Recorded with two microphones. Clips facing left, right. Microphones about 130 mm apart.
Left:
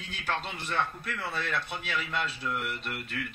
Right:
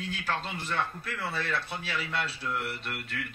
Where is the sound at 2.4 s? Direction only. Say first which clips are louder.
Even; 15° left (ahead or behind).